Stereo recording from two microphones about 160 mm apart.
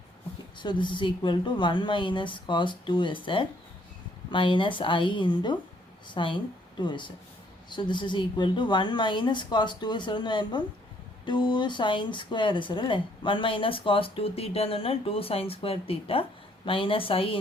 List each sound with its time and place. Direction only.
0.6 s a woman's voice: 30° left (ahead or behind)